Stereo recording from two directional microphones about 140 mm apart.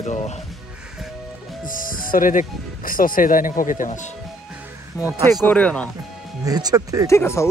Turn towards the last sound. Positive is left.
turn(degrees=20)  # may be behind; listen again after turning